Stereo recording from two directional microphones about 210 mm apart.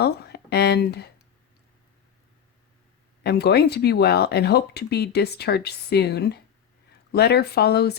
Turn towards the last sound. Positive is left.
turn(degrees=50)  # may be behind; listen again after turning